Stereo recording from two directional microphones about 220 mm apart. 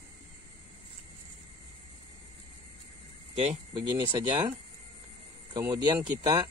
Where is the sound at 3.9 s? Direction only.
20° right (ahead or behind).